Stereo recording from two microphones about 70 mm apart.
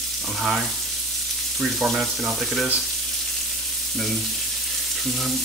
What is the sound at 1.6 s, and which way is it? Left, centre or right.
Speech, centre.